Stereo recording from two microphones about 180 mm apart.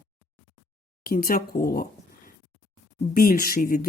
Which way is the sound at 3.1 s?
55° left (ahead or behind).